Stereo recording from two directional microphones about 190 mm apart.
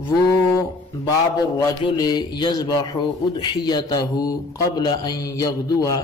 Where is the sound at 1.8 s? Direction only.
20° left (ahead or behind).